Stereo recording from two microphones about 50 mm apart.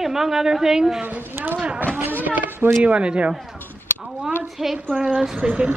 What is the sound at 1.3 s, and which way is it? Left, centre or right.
Speech, right.